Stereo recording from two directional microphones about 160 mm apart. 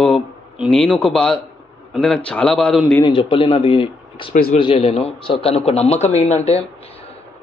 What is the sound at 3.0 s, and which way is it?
A man's voice, 30° left (ahead or behind).